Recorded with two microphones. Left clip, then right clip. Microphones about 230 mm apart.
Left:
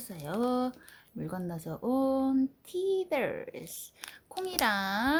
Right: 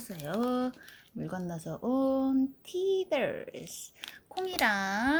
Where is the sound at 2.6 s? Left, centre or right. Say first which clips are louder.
Right 1 dB; left.